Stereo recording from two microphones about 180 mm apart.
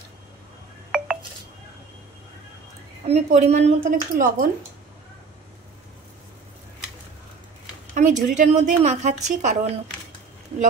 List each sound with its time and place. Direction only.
0.9 s telephone dialing: 5° right (ahead or behind)
3.3 s a woman's voice: 40° right (ahead or behind)
7.9 s a woman's voice: 45° right (ahead or behind)